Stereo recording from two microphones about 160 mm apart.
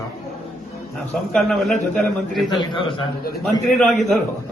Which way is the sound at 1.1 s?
Centre (ahead or behind).